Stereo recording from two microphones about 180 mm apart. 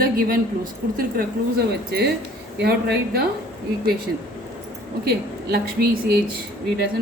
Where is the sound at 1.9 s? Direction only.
65° right (ahead or behind).